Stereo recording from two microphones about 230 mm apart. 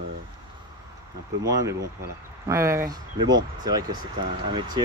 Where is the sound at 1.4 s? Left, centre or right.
Centre.